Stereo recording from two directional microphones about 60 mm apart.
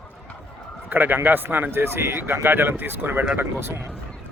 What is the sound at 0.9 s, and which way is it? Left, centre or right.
Speech, right.